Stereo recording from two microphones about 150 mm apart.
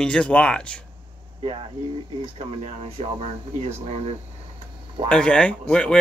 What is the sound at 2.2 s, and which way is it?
Speech, 40° right (ahead or behind).